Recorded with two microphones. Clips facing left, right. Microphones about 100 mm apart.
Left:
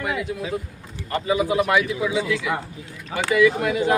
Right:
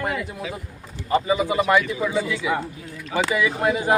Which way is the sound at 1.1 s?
Centre (ahead or behind).